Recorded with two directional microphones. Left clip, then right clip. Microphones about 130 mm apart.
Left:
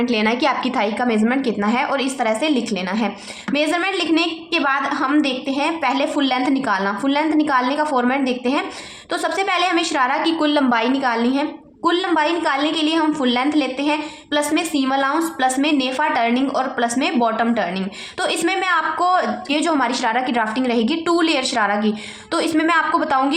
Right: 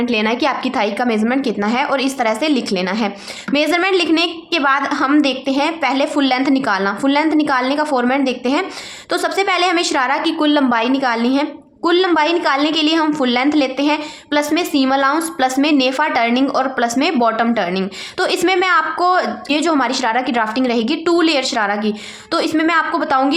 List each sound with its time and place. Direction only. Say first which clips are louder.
0.0 s a woman's voice: right 2 dB; 25° right (ahead or behind)